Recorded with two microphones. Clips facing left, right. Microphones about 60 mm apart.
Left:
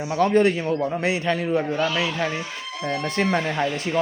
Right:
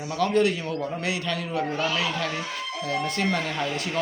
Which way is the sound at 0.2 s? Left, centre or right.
Left.